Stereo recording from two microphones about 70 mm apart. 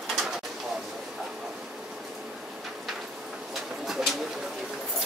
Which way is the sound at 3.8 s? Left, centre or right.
Centre.